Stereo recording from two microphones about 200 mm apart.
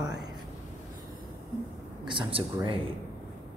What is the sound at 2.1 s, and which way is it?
Speech, 25° right (ahead or behind).